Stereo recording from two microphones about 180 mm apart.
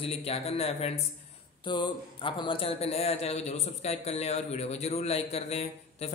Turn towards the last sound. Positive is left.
turn(degrees=35)  # may be behind; listen again after turning